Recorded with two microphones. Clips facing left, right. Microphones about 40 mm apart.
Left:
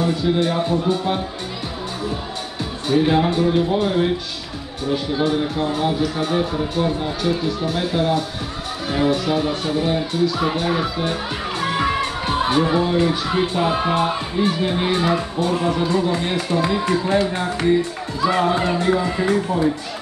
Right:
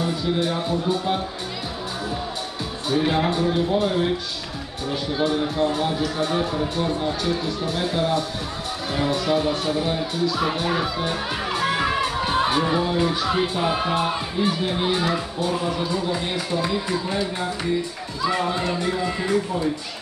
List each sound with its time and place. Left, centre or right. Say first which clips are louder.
0.0 s a man's voice: left 4 dB; centre
2.9 s a man's voice: left 4 dB; centre
15.5 s speech: left 5 dB; left
15.9 s speech: left 5 dB; left